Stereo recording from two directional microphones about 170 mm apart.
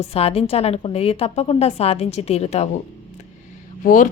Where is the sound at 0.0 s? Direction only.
35° left (ahead or behind).